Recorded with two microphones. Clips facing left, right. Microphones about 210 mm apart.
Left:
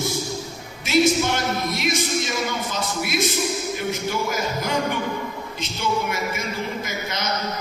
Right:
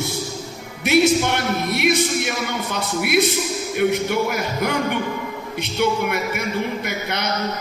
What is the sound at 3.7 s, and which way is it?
A man's voice, 60° right (ahead or behind).